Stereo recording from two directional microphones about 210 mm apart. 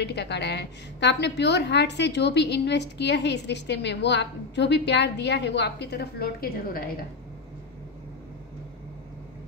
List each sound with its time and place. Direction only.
0.0 s a woman's voice: 55° left (ahead or behind)